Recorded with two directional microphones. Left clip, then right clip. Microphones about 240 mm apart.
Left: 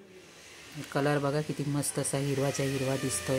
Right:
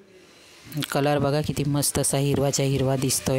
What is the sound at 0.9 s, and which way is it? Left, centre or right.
Speech, right.